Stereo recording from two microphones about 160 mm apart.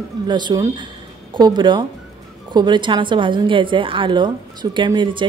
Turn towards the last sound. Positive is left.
turn(degrees=-30)  # may be behind; listen again after turning